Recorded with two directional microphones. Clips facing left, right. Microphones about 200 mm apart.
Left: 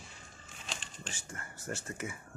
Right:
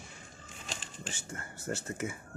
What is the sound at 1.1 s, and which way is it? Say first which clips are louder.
Speech: right 3 dB; 25° right (ahead or behind).